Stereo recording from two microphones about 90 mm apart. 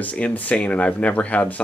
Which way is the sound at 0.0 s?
15° left (ahead or behind).